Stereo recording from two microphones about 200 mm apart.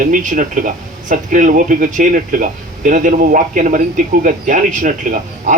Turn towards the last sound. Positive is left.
turn(degrees=-40)  # may be behind; listen again after turning